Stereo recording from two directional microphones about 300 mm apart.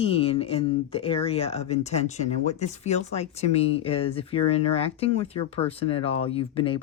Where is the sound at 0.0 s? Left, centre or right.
Centre.